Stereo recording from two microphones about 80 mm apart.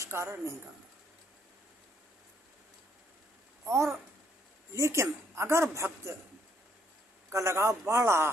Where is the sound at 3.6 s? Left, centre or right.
Right.